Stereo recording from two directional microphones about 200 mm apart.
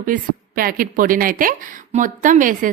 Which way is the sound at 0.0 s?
45° right (ahead or behind).